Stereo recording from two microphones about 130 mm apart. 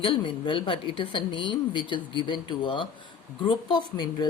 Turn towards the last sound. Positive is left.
turn(degrees=35)  # may be behind; listen again after turning